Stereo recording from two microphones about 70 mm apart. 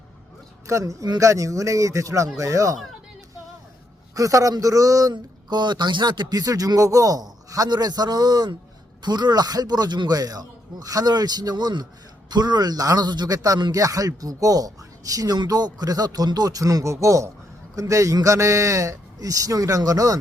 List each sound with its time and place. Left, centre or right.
0.7 s a man's voice: right
4.1 s speech: right
9.0 s a man's voice: right